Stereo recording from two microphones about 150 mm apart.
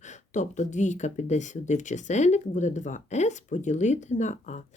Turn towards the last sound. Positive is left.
turn(degrees=50)  # may be behind; listen again after turning